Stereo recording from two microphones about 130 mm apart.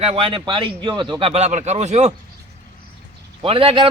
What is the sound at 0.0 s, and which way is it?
A man's voice, 45° right (ahead or behind).